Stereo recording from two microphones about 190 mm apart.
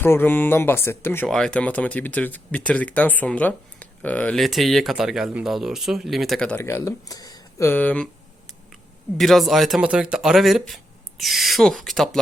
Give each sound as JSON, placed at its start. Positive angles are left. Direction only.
{"t": 0.0, "sound": "speech", "side_deg": 10}
{"t": 6.6, "sound": "speech", "side_deg": 15}